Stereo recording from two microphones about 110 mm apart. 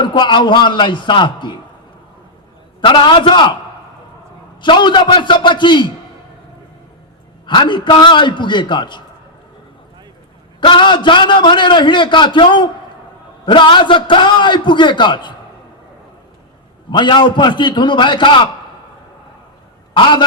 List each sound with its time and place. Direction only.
0.0 s a man's voice: 45° left (ahead or behind)
2.8 s a man's voice: 45° left (ahead or behind)
4.6 s a man's voice: 45° left (ahead or behind)
7.4 s a man's voice: 45° left (ahead or behind)
10.6 s a man's voice: 45° left (ahead or behind)
16.9 s a man's voice: 45° left (ahead or behind)
20.0 s a man's voice: 45° left (ahead or behind)